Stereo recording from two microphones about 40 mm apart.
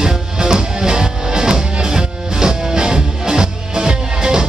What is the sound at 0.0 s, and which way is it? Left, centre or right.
Music, centre.